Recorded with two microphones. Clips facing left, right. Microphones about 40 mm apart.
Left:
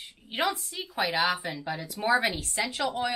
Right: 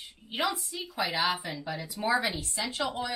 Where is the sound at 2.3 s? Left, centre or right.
Left.